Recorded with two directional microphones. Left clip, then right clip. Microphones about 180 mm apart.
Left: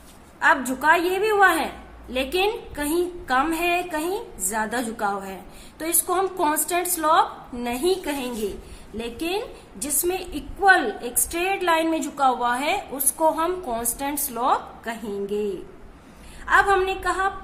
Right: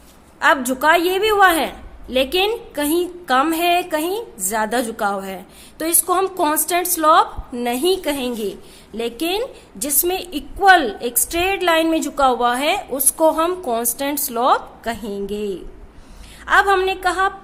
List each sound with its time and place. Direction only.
0.3 s a woman's voice: 55° right (ahead or behind)
14.0 s a woman's voice: 55° right (ahead or behind)